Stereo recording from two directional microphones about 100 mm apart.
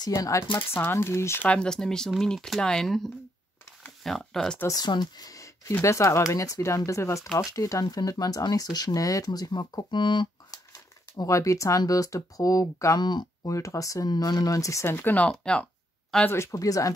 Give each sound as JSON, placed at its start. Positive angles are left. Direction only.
{"t": 0.0, "sound": "speech", "side_deg": 35}
{"t": 0.6, "sound": "speech", "side_deg": 20}
{"t": 1.5, "sound": "speech", "side_deg": 10}
{"t": 4.6, "sound": "speech", "side_deg": 45}
{"t": 13.0, "sound": "speech", "side_deg": 45}
{"t": 16.3, "sound": "speech", "side_deg": 30}